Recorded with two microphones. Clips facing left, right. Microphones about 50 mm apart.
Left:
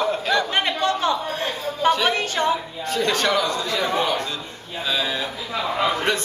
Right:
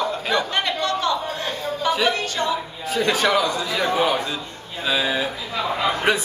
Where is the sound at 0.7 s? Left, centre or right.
Left.